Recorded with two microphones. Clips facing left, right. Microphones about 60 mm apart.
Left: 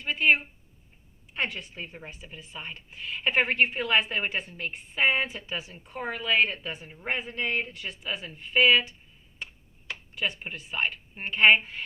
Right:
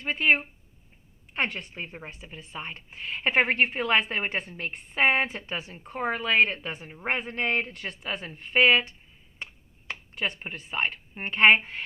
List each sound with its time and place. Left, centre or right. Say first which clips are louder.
0.0 s a woman's voice: even; right
1.7 s a woman's voice: right 2 dB; right
9.4 s speech: even; right